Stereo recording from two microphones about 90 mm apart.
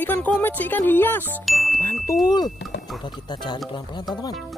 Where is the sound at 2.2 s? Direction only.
50° left (ahead or behind).